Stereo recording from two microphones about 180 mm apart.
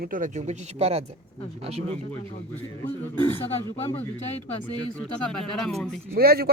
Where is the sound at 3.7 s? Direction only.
35° left (ahead or behind).